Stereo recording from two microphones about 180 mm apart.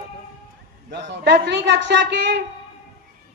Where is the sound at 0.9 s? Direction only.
70° right (ahead or behind).